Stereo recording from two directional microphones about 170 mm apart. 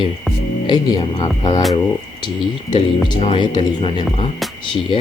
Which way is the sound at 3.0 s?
30° left (ahead or behind).